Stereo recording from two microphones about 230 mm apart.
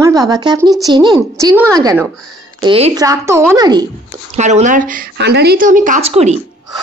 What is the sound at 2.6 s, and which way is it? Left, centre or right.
Speech, right.